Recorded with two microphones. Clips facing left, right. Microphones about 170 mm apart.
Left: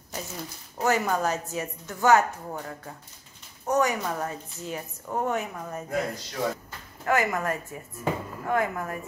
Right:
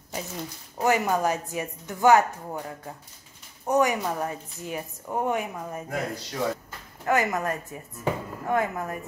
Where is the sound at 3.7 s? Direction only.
15° right (ahead or behind).